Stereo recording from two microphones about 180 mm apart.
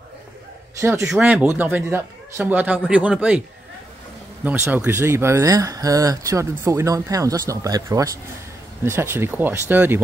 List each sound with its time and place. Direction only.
0.7 s speech: 15° right (ahead or behind)
1.0 s speech: 5° right (ahead or behind)
4.5 s speech: 10° right (ahead or behind)